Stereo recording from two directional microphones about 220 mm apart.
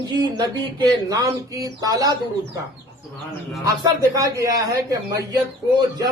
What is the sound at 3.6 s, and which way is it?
A man's voice, 15° right (ahead or behind).